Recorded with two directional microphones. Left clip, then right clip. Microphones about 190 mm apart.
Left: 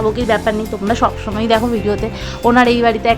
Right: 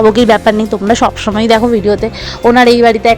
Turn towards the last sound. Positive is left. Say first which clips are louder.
# right 6 dB
turn(degrees=-20)  # may be behind; listen again after turning